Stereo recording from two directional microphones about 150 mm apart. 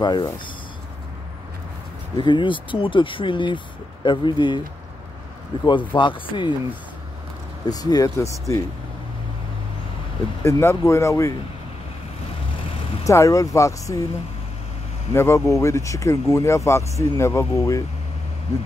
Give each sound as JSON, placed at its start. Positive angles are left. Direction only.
{"t": 0.0, "sound": "speech", "side_deg": 30}
{"t": 2.1, "sound": "speech", "side_deg": 30}
{"t": 5.7, "sound": "speech", "side_deg": 30}
{"t": 7.6, "sound": "speech", "side_deg": 25}
{"t": 10.4, "sound": "speech", "side_deg": 15}
{"t": 13.0, "sound": "speech", "side_deg": 20}
{"t": 15.1, "sound": "speech", "side_deg": 20}